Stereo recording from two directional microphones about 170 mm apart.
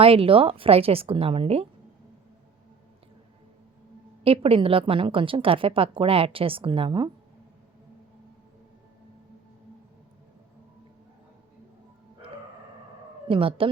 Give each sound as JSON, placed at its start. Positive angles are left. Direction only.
{"t": 0.0, "sound": "a woman's voice", "side_deg": -35}
{"t": 4.2, "sound": "a woman's voice", "side_deg": -35}
{"t": 13.2, "sound": "speech", "side_deg": -30}